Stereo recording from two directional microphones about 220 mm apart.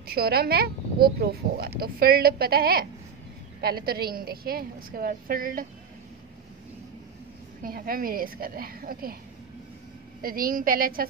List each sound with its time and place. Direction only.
0.0 s a woman's voice: 45° right (ahead or behind)
7.6 s a woman's voice: 40° right (ahead or behind)
10.2 s a woman's voice: 40° right (ahead or behind)